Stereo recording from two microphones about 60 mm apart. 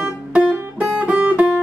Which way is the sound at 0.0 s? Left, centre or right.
Centre.